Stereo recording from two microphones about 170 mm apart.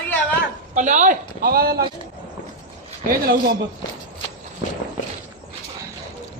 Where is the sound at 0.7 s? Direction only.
45° right (ahead or behind); by 1.8 s 65° right (ahead or behind).